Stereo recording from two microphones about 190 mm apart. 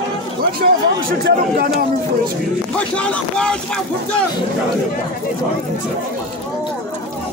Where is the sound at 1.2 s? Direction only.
50° right (ahead or behind).